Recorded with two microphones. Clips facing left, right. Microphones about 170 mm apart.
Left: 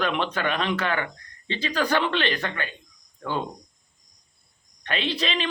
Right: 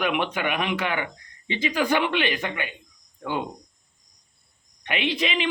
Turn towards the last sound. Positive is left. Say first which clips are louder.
# right 2 dB
turn(degrees=-15)  # may be behind; listen again after turning